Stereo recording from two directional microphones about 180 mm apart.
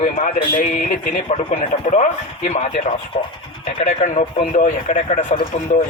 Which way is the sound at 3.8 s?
45° left (ahead or behind).